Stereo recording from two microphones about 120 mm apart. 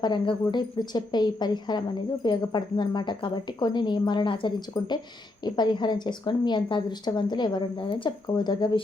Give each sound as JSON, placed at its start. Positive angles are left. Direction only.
{"t": 0.0, "sound": "speech", "side_deg": 40}